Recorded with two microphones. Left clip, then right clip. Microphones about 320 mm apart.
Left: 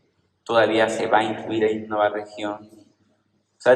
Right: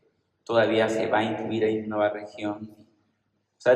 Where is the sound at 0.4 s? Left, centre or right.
Left.